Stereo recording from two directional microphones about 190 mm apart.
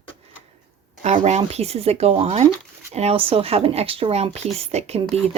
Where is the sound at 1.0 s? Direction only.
35° right (ahead or behind).